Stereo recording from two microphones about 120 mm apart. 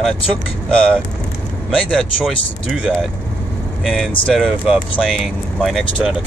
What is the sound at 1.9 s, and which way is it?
Speech, 5° left (ahead or behind).